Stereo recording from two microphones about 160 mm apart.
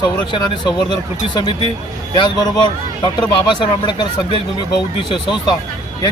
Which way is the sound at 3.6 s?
30° left (ahead or behind).